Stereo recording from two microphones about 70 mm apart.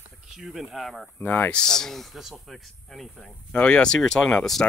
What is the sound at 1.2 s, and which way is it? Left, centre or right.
Speech, left.